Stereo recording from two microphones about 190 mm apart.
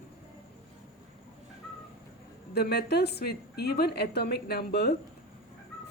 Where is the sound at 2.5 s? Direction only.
60° left (ahead or behind).